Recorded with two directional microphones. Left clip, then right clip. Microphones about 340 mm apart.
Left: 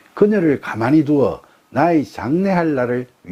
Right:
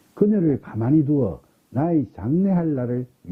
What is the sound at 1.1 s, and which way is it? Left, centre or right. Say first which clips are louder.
Speech: left 7 dB; left.